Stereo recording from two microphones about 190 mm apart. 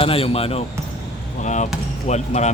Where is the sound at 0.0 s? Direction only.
30° left (ahead or behind).